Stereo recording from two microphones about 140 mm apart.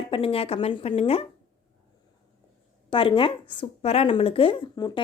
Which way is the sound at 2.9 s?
40° left (ahead or behind).